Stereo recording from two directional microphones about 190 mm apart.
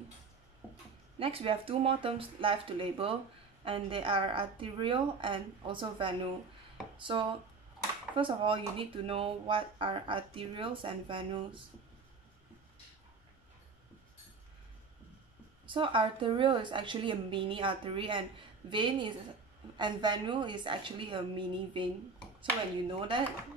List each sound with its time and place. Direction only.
1.2 s speech: 30° right (ahead or behind)
15.6 s speech: 25° right (ahead or behind)
22.9 s speech: 25° right (ahead or behind)